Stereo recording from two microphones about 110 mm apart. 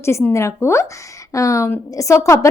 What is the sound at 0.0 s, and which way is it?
A woman's voice, 25° left (ahead or behind).